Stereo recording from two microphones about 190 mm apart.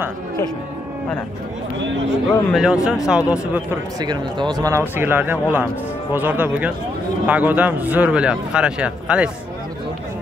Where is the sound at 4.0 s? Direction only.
20° right (ahead or behind); by 9.3 s 5° right (ahead or behind).